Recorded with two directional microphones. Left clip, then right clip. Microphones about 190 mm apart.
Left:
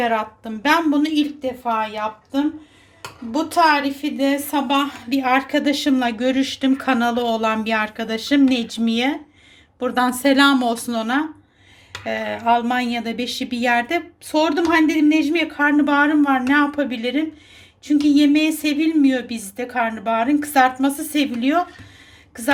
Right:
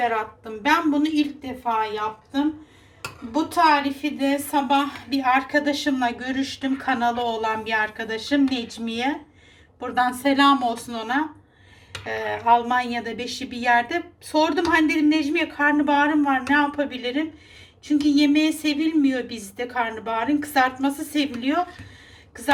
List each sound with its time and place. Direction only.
0.0 s a woman's voice: 50° left (ahead or behind)